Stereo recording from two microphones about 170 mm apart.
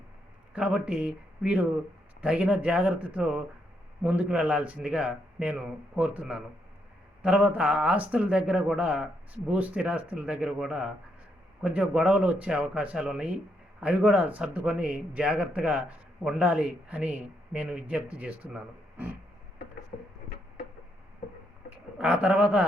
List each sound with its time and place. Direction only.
0.5 s a man's voice: 5° right (ahead or behind)
19.9 s a sound: 50° left (ahead or behind)
21.9 s speech: 5° right (ahead or behind)